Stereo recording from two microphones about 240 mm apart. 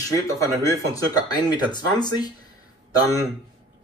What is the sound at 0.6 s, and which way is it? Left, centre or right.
Speech, centre.